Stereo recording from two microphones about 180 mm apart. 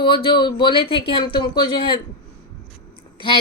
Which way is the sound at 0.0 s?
30° left (ahead or behind).